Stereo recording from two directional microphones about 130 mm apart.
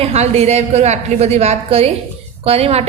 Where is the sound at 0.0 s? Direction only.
55° right (ahead or behind).